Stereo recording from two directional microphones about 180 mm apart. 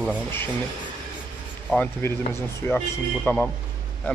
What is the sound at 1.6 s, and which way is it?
Speech, 10° left (ahead or behind).